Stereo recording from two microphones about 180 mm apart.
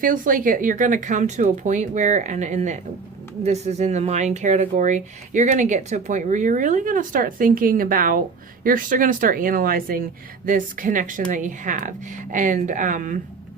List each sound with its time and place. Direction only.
0.0 s speech: 50° right (ahead or behind)